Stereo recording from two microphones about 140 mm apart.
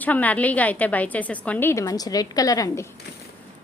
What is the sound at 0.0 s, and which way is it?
A woman's voice, 10° left (ahead or behind).